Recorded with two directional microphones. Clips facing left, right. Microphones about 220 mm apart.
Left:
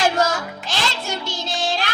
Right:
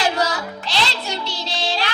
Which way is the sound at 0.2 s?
45° left (ahead or behind).